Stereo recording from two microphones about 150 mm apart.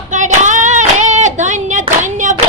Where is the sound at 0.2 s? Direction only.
55° right (ahead or behind).